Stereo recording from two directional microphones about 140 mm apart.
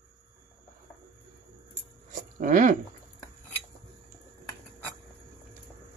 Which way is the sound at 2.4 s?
65° right (ahead or behind).